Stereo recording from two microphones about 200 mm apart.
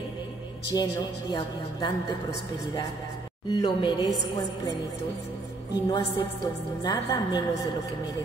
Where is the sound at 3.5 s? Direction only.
20° left (ahead or behind).